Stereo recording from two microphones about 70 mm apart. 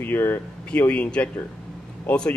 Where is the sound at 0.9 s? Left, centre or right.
Centre.